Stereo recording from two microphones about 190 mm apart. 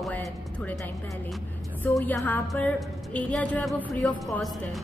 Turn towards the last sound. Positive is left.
turn(degrees=0)  # may be behind; listen again after turning